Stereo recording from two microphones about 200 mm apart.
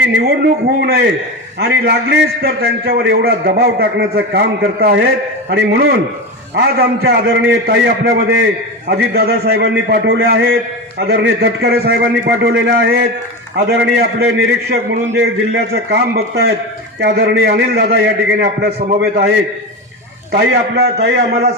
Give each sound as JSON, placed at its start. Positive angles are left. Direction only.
{"t": 0.4, "sound": "a man's voice", "side_deg": -55}
{"t": 20.3, "sound": "a man's voice", "side_deg": -55}